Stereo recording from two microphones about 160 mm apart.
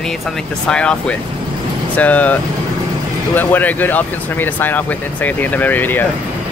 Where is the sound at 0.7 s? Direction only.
5° left (ahead or behind).